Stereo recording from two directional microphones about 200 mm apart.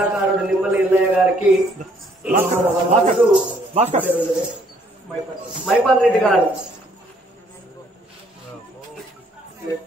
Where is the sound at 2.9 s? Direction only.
35° right (ahead or behind).